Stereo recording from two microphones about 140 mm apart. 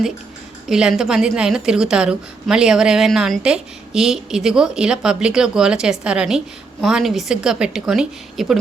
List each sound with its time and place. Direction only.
0.7 s a woman's voice: 5° right (ahead or behind)